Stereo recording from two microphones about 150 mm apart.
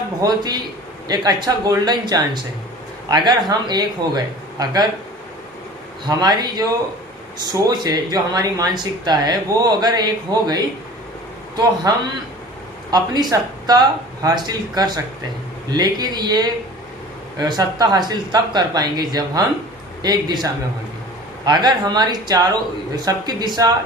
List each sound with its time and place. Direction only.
0.2 s speech: 25° right (ahead or behind)
6.1 s speech: 25° right (ahead or behind)